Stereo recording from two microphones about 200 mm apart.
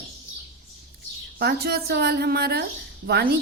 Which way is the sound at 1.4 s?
55° right (ahead or behind).